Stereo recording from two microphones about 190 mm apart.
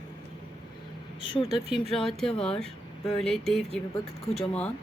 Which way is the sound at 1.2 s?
30° left (ahead or behind).